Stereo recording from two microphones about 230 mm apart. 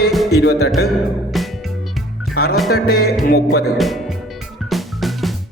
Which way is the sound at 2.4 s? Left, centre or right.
Left.